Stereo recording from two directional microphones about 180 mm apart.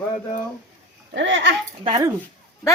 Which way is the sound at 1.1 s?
90° right.